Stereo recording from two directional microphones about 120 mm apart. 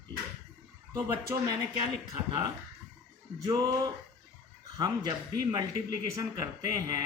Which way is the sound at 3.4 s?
30° right (ahead or behind).